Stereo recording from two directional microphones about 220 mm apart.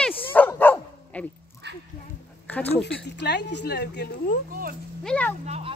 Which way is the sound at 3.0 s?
50° left (ahead or behind).